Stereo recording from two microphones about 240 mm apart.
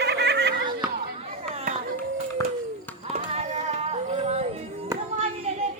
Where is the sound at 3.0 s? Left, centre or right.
Right.